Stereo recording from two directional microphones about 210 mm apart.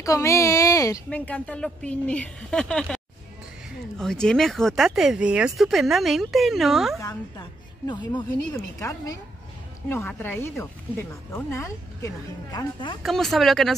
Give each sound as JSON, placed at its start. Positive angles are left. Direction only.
{"t": 0.0, "sound": "a woman's voice", "side_deg": 15}
{"t": 4.0, "sound": "speech", "side_deg": 0}
{"t": 7.0, "sound": "a woman's voice", "side_deg": 15}
{"t": 13.0, "sound": "speech", "side_deg": 0}